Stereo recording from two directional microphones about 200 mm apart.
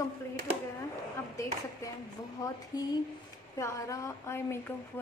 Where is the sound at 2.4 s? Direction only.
20° left (ahead or behind).